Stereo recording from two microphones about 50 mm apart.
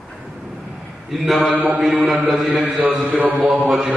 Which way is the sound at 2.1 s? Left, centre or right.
Centre.